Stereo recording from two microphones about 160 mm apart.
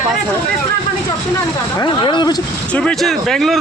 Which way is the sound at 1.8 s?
30° left (ahead or behind).